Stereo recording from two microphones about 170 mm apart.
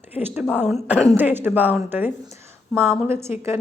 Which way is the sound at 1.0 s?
10° right (ahead or behind).